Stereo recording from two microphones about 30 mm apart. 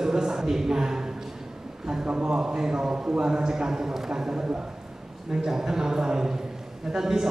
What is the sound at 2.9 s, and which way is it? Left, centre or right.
Speech, right.